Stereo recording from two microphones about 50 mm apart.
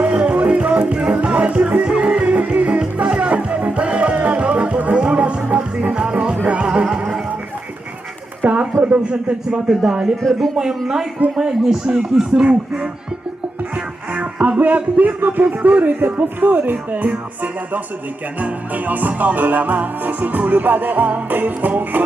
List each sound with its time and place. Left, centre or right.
0.0 s music: right
8.4 s a sound: right
9.5 s speech: centre
14.1 s speech: right
15.6 s music: right